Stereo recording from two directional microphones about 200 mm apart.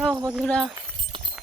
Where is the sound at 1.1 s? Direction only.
25° right (ahead or behind).